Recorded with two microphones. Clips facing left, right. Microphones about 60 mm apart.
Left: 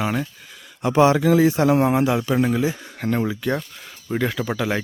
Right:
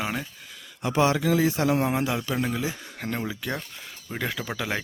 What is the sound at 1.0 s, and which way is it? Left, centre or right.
Speech, left.